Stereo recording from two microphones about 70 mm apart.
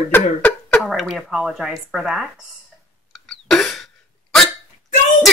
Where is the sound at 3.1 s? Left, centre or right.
Centre.